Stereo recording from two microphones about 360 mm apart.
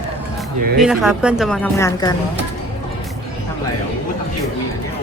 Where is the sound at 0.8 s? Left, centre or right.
Centre.